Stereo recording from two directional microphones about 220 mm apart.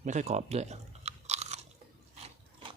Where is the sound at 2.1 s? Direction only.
25° right (ahead or behind).